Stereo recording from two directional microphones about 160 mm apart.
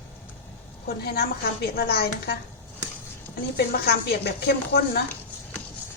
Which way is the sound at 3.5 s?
85° left.